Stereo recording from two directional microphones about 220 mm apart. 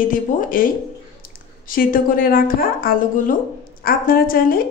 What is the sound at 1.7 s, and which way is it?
A woman's voice, 40° left (ahead or behind).